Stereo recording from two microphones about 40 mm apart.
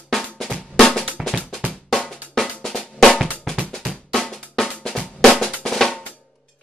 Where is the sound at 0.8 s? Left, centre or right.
Centre.